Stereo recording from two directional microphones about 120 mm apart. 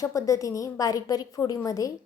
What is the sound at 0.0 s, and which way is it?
A woman's voice, 30° left (ahead or behind).